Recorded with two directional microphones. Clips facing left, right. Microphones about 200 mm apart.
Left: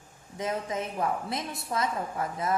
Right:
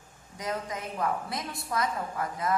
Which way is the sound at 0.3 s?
25° left (ahead or behind).